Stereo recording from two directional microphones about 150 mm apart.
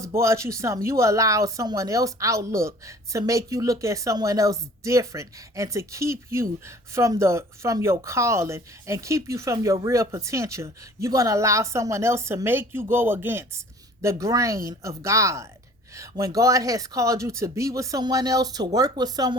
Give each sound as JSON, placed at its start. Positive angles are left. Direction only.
{"t": 0.2, "sound": "speech", "side_deg": -20}